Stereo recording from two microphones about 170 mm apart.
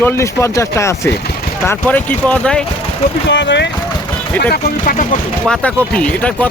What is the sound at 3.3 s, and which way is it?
Speech, 90° left.